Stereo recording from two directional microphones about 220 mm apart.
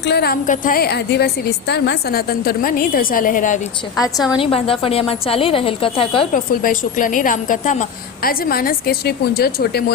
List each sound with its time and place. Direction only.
0.0 s a woman's voice: 50° left (ahead or behind)
4.4 s a woman's voice: 25° left (ahead or behind)
6.3 s a woman's voice: 40° left (ahead or behind)